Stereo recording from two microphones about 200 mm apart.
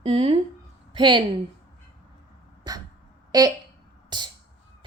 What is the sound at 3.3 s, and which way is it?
Speech, 20° right (ahead or behind).